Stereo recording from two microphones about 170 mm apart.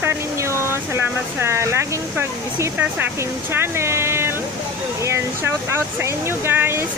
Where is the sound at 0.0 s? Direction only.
15° right (ahead or behind).